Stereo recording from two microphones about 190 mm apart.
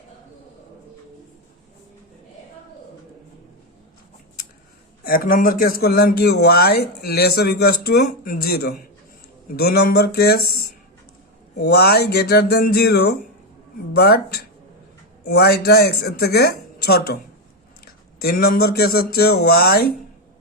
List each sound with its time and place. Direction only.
5.0 s speech: 50° left (ahead or behind)
18.2 s speech: 55° left (ahead or behind)